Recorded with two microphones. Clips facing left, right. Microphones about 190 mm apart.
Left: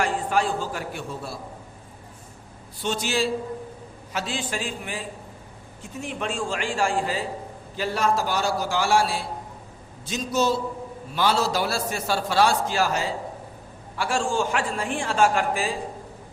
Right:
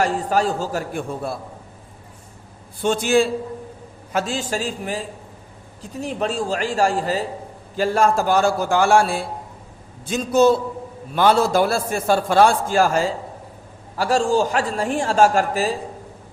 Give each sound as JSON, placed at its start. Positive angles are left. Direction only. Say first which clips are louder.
{"t": 0.0, "sound": "a man's voice", "louder": "right 4 dB", "side_deg": -40}
{"t": 2.8, "sound": "a man's voice", "louder": "right 8 dB", "side_deg": -50}